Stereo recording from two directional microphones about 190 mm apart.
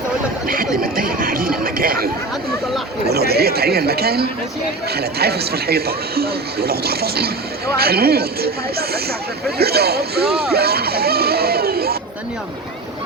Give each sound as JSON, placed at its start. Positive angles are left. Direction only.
{"t": 0.4, "sound": "chatter", "side_deg": -50}
{"t": 3.1, "sound": "speech", "side_deg": -55}
{"t": 10.5, "sound": "a sound", "side_deg": -55}